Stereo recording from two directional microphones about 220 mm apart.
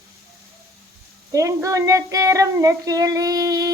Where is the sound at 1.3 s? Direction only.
15° right (ahead or behind).